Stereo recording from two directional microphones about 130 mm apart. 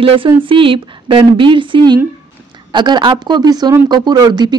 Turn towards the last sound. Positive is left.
turn(degrees=-30)  # may be behind; listen again after turning